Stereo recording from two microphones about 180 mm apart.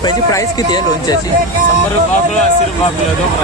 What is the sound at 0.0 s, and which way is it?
Speech, 20° left (ahead or behind).